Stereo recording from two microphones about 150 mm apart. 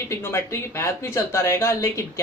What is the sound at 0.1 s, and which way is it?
A woman's voice, 20° left (ahead or behind).